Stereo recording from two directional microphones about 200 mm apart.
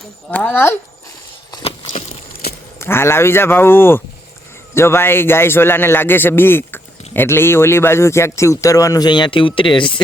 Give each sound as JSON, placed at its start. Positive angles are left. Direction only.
{"t": 0.3, "sound": "a man's voice", "side_deg": 10}
{"t": 1.9, "sound": "a sound", "side_deg": 30}
{"t": 2.7, "sound": "a man's voice", "side_deg": 10}